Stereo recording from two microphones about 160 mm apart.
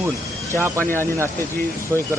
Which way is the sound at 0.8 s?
15° left (ahead or behind).